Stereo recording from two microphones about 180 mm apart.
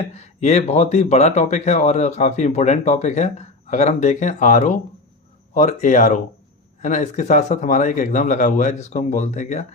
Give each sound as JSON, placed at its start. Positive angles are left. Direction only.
{"t": 0.1, "sound": "speech", "side_deg": 35}